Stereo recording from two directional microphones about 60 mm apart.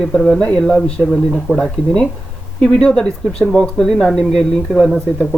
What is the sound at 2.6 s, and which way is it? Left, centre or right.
Speech, centre.